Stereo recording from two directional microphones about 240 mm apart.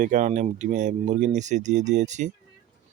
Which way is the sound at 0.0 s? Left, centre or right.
Right.